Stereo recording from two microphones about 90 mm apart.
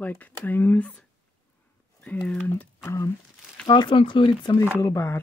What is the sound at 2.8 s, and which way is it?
Speech, 30° left (ahead or behind).